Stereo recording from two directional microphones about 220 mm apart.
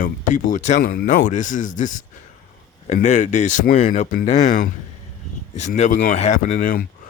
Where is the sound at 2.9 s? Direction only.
30° left (ahead or behind).